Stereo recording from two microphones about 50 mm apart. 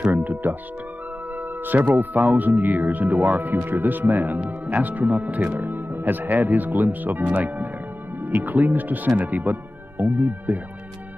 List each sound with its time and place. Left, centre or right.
0.1 s music: right
1.6 s speech: right